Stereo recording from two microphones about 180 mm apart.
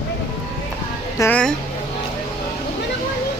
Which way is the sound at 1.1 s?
10° left (ahead or behind).